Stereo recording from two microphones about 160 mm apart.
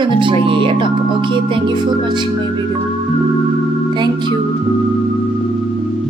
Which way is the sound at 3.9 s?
30° right (ahead or behind).